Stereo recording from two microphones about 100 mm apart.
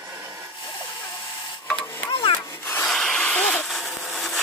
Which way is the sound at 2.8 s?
5° left (ahead or behind).